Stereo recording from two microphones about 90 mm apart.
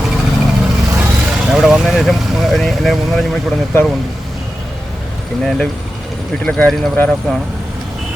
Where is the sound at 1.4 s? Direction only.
10° right (ahead or behind).